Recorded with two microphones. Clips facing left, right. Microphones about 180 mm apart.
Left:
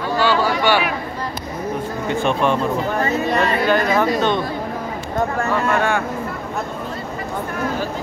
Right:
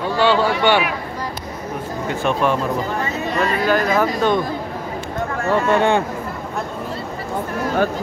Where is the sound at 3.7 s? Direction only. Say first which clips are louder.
Right 1 dB; 5° right (ahead or behind).